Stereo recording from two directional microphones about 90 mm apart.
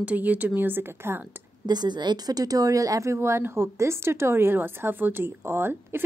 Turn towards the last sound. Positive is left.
turn(degrees=-25)  # may be behind; listen again after turning